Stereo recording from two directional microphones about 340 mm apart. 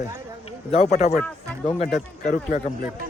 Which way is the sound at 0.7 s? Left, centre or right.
Centre.